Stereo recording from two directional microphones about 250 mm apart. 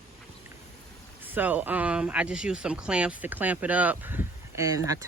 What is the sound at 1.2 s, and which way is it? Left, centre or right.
Speech, centre.